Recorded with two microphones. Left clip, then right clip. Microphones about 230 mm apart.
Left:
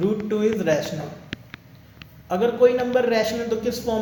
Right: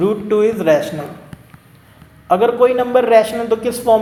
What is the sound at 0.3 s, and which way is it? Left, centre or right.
Speech, right.